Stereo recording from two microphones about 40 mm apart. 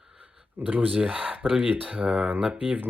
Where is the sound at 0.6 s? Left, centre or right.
Right.